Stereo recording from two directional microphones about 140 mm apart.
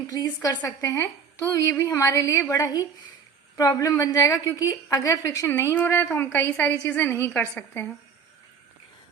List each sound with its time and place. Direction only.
0.1 s a woman's voice: 30° left (ahead or behind)